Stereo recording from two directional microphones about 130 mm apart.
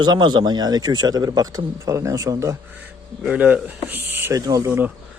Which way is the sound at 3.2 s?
10° right (ahead or behind).